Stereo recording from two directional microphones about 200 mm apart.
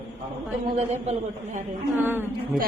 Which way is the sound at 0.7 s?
35° right (ahead or behind).